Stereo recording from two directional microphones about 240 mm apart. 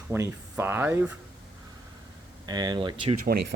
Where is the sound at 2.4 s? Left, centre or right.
Centre.